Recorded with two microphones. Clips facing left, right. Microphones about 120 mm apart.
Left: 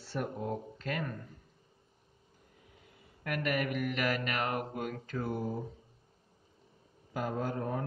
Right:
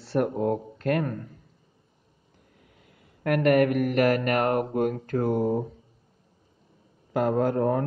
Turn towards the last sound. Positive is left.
turn(degrees=-60)  # may be behind; listen again after turning